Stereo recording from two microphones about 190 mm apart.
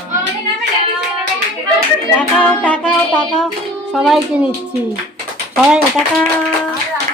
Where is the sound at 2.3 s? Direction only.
5° left (ahead or behind).